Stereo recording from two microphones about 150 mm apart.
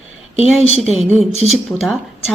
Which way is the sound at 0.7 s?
45° left (ahead or behind).